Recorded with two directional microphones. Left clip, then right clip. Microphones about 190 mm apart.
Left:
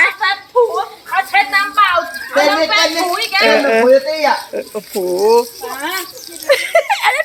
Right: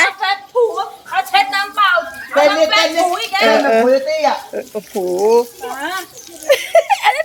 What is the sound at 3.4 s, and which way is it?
A woman's voice, centre (ahead or behind).